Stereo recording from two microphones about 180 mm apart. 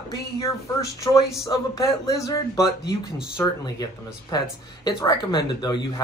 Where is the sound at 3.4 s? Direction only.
20° left (ahead or behind).